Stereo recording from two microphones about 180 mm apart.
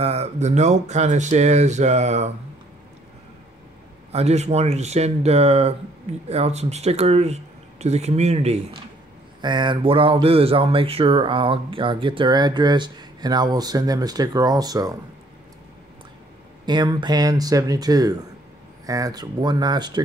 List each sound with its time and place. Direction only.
0.0 s speech: 35° right (ahead or behind)
4.1 s speech: 35° right (ahead or behind)
9.4 s speech: 25° right (ahead or behind)
16.6 s speech: 25° right (ahead or behind)